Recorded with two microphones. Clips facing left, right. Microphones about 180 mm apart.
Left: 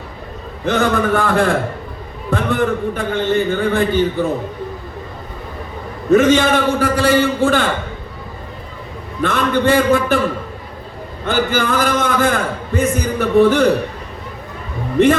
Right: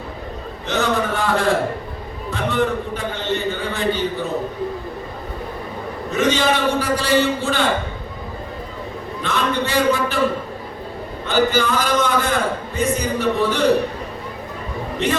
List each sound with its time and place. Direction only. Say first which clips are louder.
0.6 s a man's voice: left 4 dB; 55° left (ahead or behind)
6.1 s a man's voice: left 7 dB; 50° left (ahead or behind)
9.2 s a man's voice: left 6 dB; 55° left (ahead or behind)
11.3 s a man's voice: left 1 dB; 55° left (ahead or behind)